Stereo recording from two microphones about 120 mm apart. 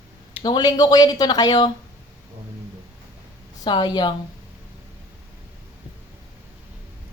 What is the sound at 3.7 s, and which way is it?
Speech, 40° left (ahead or behind).